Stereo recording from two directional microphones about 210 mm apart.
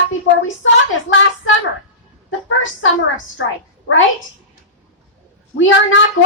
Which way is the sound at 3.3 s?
65° left (ahead or behind).